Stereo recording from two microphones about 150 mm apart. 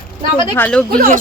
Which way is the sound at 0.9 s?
75° right (ahead or behind).